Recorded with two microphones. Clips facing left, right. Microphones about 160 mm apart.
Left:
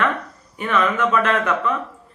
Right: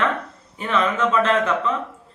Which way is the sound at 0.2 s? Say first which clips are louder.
Left 2 dB; 25° right (ahead or behind).